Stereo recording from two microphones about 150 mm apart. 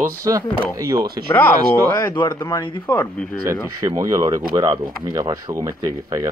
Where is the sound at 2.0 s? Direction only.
30° left (ahead or behind).